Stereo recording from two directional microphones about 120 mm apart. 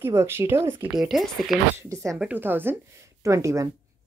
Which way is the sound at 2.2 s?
15° right (ahead or behind).